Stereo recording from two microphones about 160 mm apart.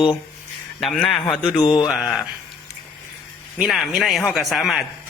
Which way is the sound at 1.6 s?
30° left (ahead or behind).